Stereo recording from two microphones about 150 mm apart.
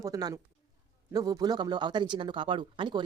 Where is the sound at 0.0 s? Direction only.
25° right (ahead or behind).